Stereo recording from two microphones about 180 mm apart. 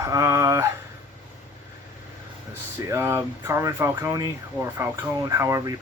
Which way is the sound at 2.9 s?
15° right (ahead or behind).